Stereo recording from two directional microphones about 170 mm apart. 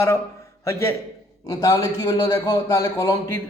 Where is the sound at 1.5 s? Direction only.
20° left (ahead or behind).